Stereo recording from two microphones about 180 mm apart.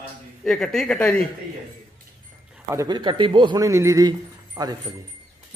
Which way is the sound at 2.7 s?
20° right (ahead or behind).